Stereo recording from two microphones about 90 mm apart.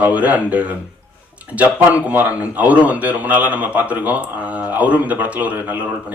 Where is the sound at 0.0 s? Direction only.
15° right (ahead or behind).